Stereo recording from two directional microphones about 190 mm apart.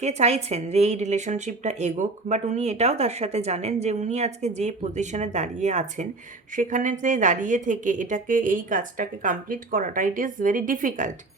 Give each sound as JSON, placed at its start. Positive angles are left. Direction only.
{"t": 0.0, "sound": "a woman's voice", "side_deg": -35}